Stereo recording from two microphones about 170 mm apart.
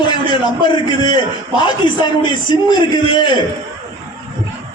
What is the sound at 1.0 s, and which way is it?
A man's voice, 25° left (ahead or behind).